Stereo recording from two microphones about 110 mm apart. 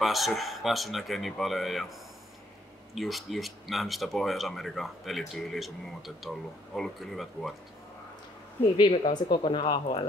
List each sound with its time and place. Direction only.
0.0 s speech: centre (ahead or behind)
2.9 s speech: centre (ahead or behind)
9.1 s speech: 50° left (ahead or behind)